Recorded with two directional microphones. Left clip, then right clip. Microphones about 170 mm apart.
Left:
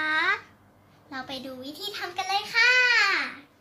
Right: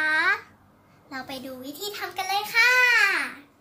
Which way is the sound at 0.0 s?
25° right (ahead or behind).